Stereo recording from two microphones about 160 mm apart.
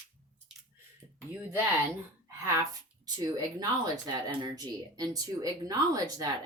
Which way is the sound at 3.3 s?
25° right (ahead or behind).